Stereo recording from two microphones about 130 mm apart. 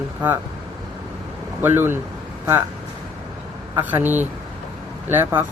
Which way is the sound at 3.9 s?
15° right (ahead or behind).